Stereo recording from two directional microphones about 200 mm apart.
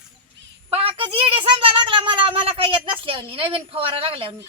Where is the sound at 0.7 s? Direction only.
25° right (ahead or behind).